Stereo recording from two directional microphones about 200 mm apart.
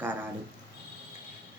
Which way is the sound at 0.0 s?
10° right (ahead or behind).